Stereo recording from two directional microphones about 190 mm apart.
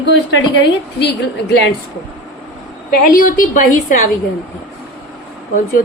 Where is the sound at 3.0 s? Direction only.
45° left (ahead or behind).